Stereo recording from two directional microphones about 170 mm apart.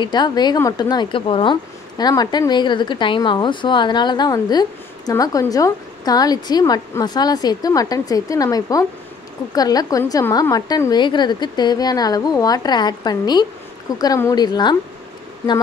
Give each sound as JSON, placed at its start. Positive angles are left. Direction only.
{"t": 0.0, "sound": "speech", "side_deg": 25}